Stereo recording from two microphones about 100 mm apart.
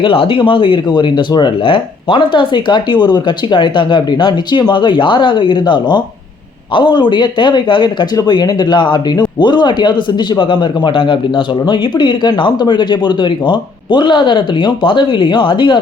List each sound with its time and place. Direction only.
0.0 s speech: 60° left (ahead or behind)